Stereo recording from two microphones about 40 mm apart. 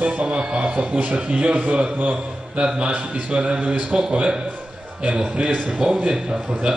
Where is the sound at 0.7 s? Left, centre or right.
Right.